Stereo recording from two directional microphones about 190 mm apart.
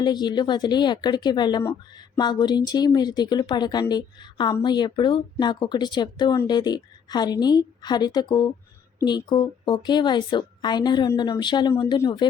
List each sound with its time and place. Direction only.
0.0 s speech: 20° left (ahead or behind)